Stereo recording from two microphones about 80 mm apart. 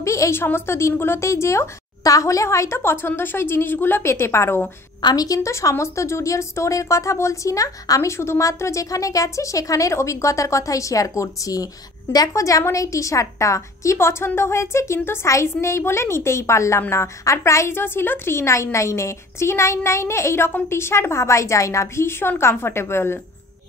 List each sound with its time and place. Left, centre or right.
0.0 s a woman's voice: left
5.0 s a woman's voice: left